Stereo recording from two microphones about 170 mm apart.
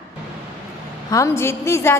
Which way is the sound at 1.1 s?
15° left (ahead or behind).